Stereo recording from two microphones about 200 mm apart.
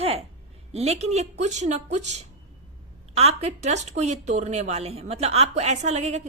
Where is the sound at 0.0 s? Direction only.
30° right (ahead or behind).